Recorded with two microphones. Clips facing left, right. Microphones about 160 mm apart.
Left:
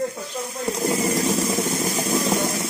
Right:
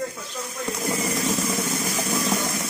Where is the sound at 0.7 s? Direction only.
30° left (ahead or behind).